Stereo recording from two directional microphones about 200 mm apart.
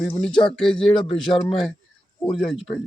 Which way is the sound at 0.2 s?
5° left (ahead or behind).